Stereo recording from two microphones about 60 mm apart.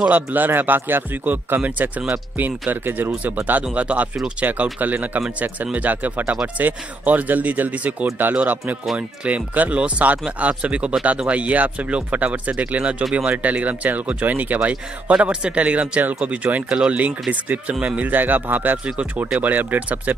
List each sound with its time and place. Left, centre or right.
0.0 s speech: right